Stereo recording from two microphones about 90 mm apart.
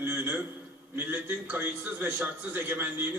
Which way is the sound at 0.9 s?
20° right (ahead or behind).